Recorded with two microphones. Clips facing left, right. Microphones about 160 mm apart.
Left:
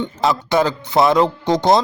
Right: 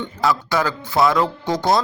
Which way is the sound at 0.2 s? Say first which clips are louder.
Left 3 dB; 25° left (ahead or behind).